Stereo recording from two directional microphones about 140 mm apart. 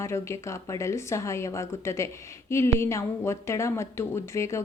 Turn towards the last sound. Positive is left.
turn(degrees=20)  # may be behind; listen again after turning